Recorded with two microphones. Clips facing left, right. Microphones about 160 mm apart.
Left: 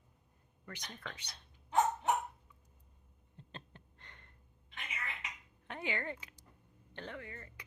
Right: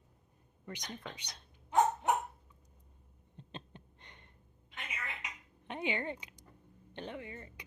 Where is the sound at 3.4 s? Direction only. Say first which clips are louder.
Right 4 dB; 20° right (ahead or behind).